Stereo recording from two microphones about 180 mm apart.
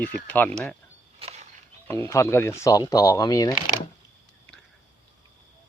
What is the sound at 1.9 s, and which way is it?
Speech, 15° left (ahead or behind).